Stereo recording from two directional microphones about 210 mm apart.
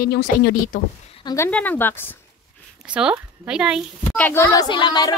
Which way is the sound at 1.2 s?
10° left (ahead or behind).